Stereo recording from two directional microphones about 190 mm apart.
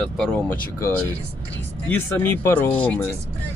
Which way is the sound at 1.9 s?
10° left (ahead or behind).